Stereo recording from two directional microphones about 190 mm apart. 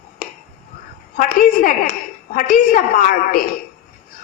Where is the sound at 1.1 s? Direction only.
45° left (ahead or behind).